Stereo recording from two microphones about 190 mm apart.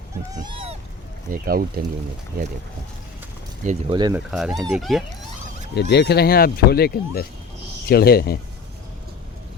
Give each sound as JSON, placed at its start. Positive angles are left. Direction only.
{"t": 0.3, "sound": "speech", "side_deg": -20}
{"t": 1.3, "sound": "speech", "side_deg": -50}
{"t": 3.7, "sound": "speech", "side_deg": -35}
{"t": 4.1, "sound": "speech", "side_deg": -5}
{"t": 5.7, "sound": "speech", "side_deg": 60}